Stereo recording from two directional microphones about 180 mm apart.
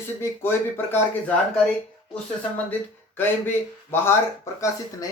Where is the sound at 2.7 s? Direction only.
10° left (ahead or behind).